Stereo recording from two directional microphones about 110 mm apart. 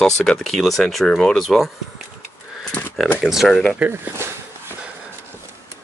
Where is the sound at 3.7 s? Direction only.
15° right (ahead or behind).